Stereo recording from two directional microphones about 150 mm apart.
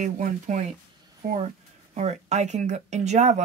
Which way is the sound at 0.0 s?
55° right (ahead or behind).